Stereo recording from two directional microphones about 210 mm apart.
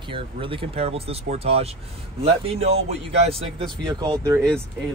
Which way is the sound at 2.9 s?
30° right (ahead or behind).